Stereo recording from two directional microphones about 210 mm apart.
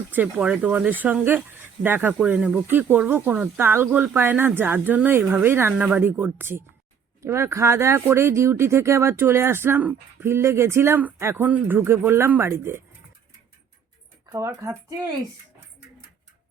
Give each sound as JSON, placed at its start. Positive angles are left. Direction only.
{"t": 0.1, "sound": "speech", "side_deg": -5}
{"t": 14.3, "sound": "speech", "side_deg": -15}